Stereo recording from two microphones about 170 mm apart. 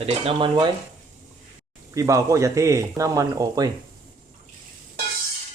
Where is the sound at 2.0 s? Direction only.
20° right (ahead or behind).